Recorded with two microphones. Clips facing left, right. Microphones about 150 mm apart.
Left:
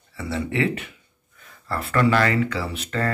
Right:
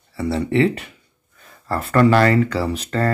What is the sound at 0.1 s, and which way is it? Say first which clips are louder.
Speech: right 7 dB; 35° right (ahead or behind).